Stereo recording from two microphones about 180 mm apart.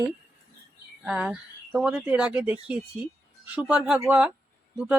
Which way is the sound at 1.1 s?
5° right (ahead or behind).